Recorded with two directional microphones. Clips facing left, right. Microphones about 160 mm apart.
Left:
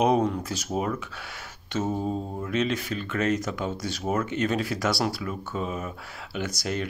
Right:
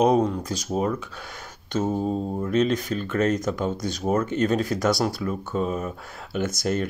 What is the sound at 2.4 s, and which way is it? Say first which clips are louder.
Speech: right 5 dB; 40° right (ahead or behind).